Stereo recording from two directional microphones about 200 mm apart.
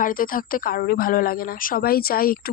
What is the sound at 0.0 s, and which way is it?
A woman's voice, 45° left (ahead or behind).